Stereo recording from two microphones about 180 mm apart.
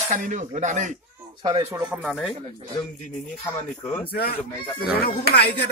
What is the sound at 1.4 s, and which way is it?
Speech, 20° right (ahead or behind).